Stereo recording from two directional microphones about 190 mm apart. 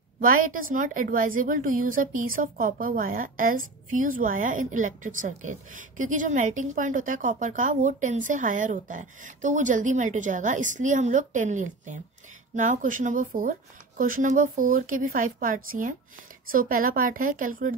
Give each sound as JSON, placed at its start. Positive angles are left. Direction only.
{"t": 0.2, "sound": "a woman's voice", "side_deg": -45}